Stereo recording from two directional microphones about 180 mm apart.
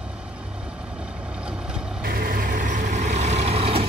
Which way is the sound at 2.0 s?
55° right (ahead or behind).